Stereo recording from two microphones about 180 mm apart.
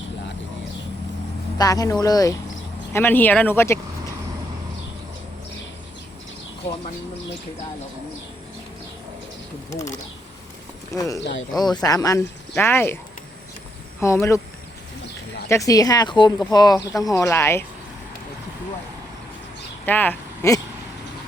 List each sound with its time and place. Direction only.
1.5 s speech: 20° left (ahead or behind)
9.6 s speech: 15° left (ahead or behind)
10.9 s speech: 20° left (ahead or behind)
11.2 s speech: 75° left (ahead or behind)
11.6 s speech: 20° left (ahead or behind)
14.0 s speech: 15° left (ahead or behind)
15.4 s speech: 15° left (ahead or behind)
19.8 s speech: 10° left (ahead or behind)